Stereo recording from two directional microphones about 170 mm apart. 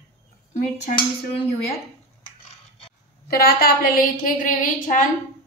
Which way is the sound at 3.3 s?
60° left (ahead or behind).